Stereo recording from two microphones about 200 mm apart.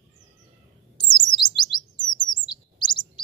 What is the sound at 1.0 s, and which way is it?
Bird, 20° left (ahead or behind).